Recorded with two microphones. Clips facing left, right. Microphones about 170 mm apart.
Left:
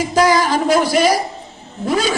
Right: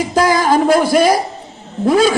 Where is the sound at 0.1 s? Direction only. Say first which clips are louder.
Right 1 dB; 50° right (ahead or behind).